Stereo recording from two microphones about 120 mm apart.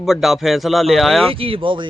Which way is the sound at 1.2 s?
50° right (ahead or behind).